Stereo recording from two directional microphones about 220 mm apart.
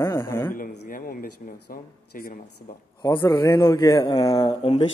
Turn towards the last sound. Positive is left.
turn(degrees=25)  # may be behind; listen again after turning